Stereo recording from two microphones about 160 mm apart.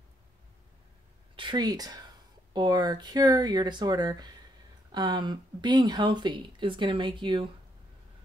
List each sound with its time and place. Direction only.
1.3 s speech: 30° right (ahead or behind)